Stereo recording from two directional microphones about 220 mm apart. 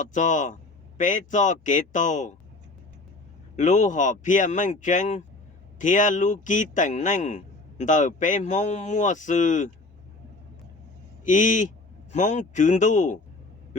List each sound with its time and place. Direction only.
0.0 s a man's voice: 35° left (ahead or behind)
3.5 s a man's voice: 35° left (ahead or behind)
11.3 s a man's voice: 35° left (ahead or behind)